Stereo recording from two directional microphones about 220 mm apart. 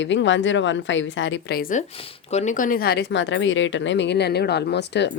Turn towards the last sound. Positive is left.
turn(degrees=50)  # may be behind; listen again after turning